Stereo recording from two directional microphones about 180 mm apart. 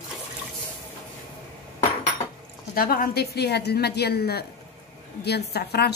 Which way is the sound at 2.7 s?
55° left (ahead or behind).